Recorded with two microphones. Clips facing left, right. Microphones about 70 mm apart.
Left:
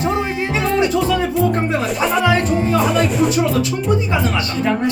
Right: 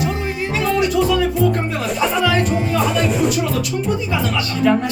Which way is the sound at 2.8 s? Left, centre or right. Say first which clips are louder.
Left 1 dB; centre.